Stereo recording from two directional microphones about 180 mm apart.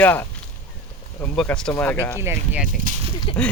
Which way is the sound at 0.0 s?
10° left (ahead or behind).